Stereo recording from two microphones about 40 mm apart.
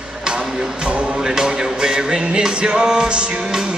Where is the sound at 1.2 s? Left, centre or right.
Centre.